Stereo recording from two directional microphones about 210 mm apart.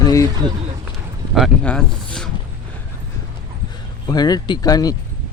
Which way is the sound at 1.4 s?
5° left (ahead or behind).